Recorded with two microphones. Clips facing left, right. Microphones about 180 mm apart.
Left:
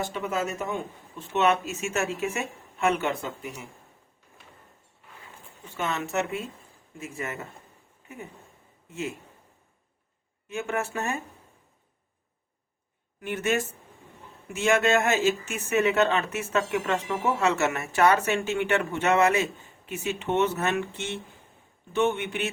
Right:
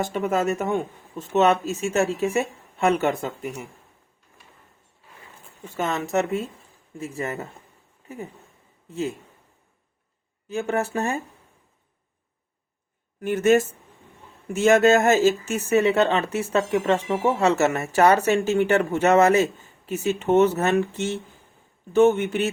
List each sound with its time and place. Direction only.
0.0 s speech: 50° right (ahead or behind)
1.2 s speech: 40° right (ahead or behind)
5.6 s speech: 40° right (ahead or behind)
10.5 s speech: 35° right (ahead or behind)
13.1 s speech: 45° right (ahead or behind)